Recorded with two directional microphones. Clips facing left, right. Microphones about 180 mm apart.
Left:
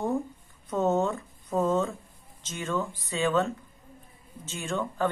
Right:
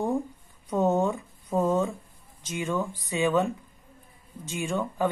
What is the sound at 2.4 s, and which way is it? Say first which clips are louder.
A woman's voice: right 2 dB; 15° right (ahead or behind).